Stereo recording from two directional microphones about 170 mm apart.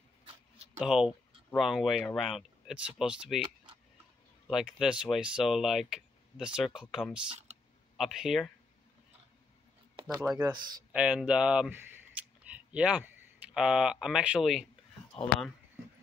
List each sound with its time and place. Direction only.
0.7 s speech: 5° right (ahead or behind)
4.5 s speech: centre (ahead or behind)
7.2 s a sound: 40° right (ahead or behind)
8.0 s speech: centre (ahead or behind)
9.9 s a sound: 25° right (ahead or behind)
10.3 s speech: 20° right (ahead or behind)
10.9 s speech: 5° right (ahead or behind)